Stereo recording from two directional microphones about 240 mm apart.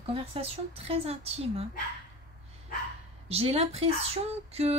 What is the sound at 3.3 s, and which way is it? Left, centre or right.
A woman's voice, right.